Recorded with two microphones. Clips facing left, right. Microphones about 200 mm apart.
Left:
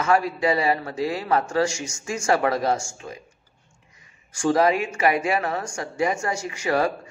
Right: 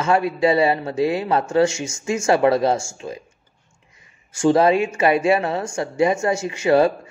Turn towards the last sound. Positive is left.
turn(degrees=-25)  # may be behind; listen again after turning